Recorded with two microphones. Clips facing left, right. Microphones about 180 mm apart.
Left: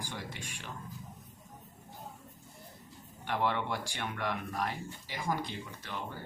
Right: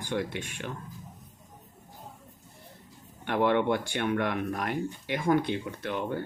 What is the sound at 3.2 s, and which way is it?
Speech, 60° right (ahead or behind).